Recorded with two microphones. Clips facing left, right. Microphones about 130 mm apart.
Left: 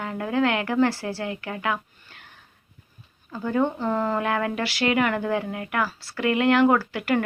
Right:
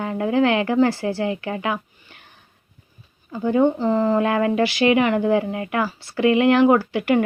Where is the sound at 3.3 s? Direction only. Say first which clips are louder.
Right 6 dB; 20° right (ahead or behind).